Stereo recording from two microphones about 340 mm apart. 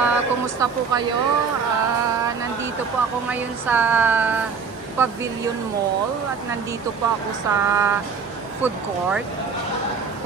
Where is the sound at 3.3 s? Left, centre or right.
Centre.